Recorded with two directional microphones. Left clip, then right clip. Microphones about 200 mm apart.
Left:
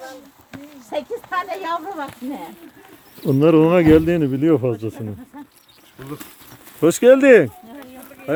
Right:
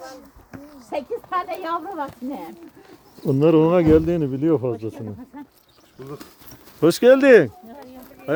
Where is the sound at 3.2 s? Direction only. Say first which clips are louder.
Left 2 dB; 15° left (ahead or behind).